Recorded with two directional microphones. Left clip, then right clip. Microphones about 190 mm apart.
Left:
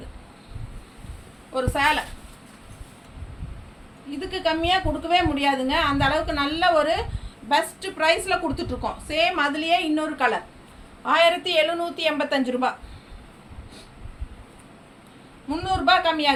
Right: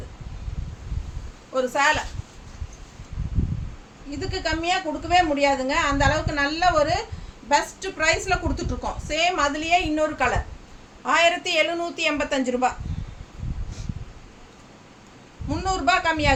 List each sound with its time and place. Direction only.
1.5 s a woman's voice: 15° right (ahead or behind)
4.2 s a woman's voice: 10° right (ahead or behind)
15.4 s a man's voice: 10° right (ahead or behind)